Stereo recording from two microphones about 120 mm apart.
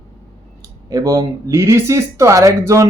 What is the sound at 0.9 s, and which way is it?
A man's voice, 30° right (ahead or behind).